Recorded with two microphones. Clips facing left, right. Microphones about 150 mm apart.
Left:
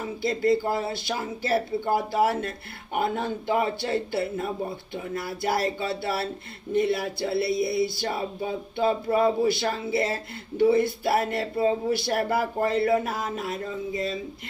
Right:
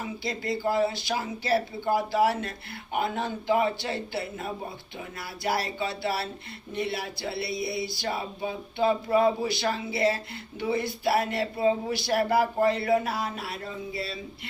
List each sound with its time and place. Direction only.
0.2 s speech: 50° left (ahead or behind)